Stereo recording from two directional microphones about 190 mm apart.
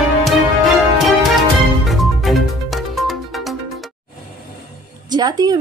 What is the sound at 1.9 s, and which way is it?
Music, centre (ahead or behind).